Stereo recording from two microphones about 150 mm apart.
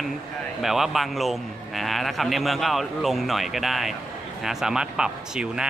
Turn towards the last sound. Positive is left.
turn(degrees=-5)  # may be behind; listen again after turning